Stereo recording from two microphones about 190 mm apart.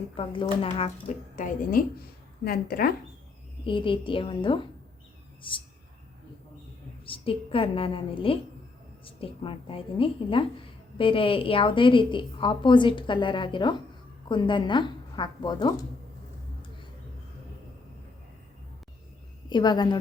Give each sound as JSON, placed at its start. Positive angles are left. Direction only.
{"t": 1.0, "sound": "speech", "side_deg": 45}
{"t": 3.6, "sound": "a woman's voice", "side_deg": 25}
{"t": 7.0, "sound": "a woman's voice", "side_deg": 30}
{"t": 19.5, "sound": "a woman's voice", "side_deg": 20}